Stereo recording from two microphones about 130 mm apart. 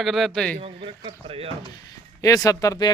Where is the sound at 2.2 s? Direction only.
25° left (ahead or behind).